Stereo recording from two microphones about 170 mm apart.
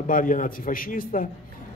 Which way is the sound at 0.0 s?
55° left (ahead or behind).